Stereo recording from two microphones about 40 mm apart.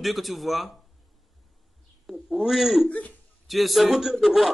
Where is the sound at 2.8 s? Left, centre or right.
Left.